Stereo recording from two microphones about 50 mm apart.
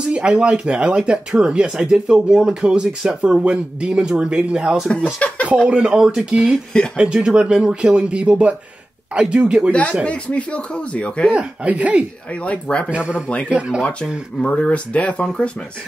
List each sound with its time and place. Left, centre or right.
0.0 s speech: centre
5.0 s speech: left
5.7 s speech: centre
9.7 s speech: left
11.3 s speech: right
12.4 s speech: left
12.9 s speech: right
14.4 s speech: left